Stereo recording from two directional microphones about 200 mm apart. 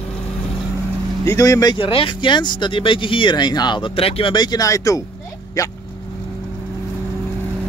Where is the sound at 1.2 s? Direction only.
15° left (ahead or behind).